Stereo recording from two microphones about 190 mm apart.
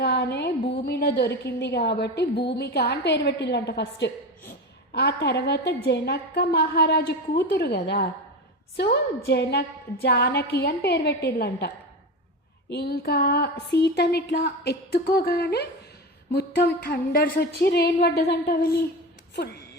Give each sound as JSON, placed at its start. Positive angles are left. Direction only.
{"t": 0.0, "sound": "a woman's voice", "side_deg": 60}
{"t": 12.7, "sound": "a woman's voice", "side_deg": 55}